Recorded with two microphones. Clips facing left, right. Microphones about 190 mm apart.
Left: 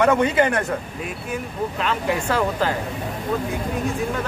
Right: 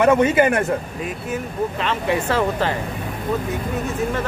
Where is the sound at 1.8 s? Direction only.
Centre (ahead or behind).